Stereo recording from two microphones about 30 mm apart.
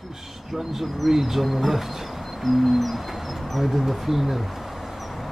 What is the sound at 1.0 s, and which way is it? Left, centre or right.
Speech, centre.